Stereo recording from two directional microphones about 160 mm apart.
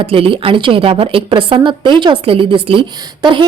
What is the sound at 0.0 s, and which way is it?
A woman's voice, 35° right (ahead or behind).